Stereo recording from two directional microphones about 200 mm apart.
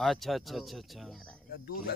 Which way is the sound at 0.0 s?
Centre (ahead or behind).